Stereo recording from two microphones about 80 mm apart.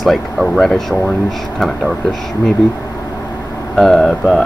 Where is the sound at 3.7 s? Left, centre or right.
Centre.